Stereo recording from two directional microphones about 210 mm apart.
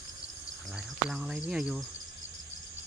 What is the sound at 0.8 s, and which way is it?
Speech, 5° right (ahead or behind).